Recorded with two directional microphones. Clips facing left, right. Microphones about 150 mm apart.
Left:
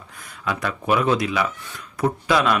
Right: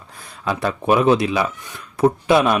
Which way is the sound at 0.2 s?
30° right (ahead or behind).